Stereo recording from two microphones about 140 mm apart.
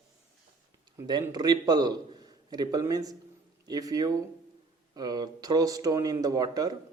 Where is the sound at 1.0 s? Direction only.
30° right (ahead or behind).